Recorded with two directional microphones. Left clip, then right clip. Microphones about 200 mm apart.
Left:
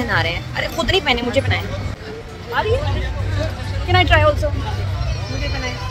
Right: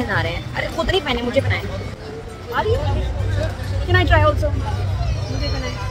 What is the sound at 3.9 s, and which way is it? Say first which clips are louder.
Speech: left 2 dB; 5° left (ahead or behind).